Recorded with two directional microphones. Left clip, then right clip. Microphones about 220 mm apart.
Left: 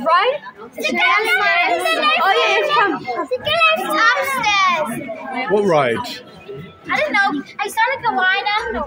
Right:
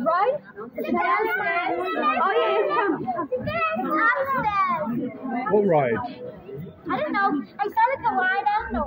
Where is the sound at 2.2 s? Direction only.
25° left (ahead or behind).